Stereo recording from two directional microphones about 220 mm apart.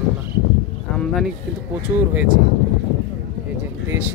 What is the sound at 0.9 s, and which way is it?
Speech, 5° left (ahead or behind).